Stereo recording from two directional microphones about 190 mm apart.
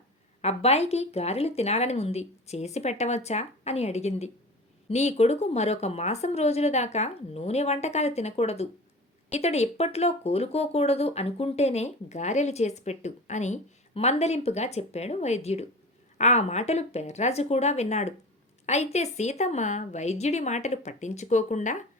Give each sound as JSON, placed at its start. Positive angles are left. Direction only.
{"t": 0.4, "sound": "speech", "side_deg": 35}